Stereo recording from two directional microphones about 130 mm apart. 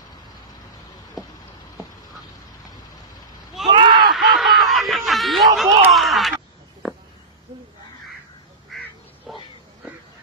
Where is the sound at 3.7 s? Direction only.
35° right (ahead or behind).